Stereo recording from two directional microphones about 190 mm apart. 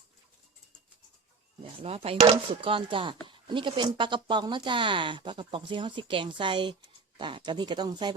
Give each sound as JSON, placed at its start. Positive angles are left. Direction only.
{"t": 1.6, "sound": "speech", "side_deg": -30}